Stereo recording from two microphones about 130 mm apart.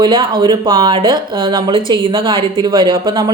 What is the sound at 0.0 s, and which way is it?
Speech, 40° right (ahead or behind).